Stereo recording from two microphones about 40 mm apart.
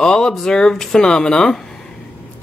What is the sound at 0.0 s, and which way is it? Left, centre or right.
Speech, centre.